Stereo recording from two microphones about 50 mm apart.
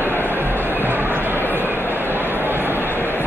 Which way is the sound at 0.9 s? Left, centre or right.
Right.